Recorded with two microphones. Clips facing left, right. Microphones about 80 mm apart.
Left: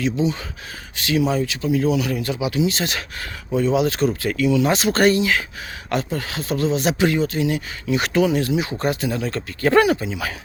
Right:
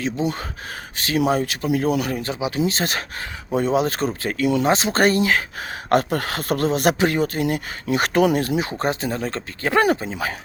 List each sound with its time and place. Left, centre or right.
0.0 s speech: right
1.2 s speech: right
4.4 s speech: right
4.7 s speech: right
5.9 s speech: right
8.4 s speech: right